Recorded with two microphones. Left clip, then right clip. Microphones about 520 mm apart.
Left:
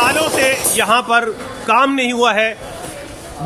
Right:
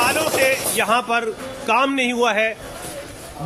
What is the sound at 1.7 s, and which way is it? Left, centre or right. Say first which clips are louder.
Speech: left 5 dB; right.